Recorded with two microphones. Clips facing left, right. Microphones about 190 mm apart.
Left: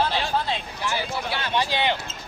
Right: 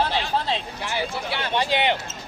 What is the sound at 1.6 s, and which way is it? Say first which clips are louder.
Speech: right 4 dB; 20° right (ahead or behind).